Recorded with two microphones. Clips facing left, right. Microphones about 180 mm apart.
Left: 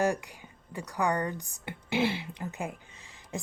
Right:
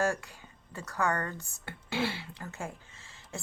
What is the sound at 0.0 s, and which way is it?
Speech, 15° left (ahead or behind).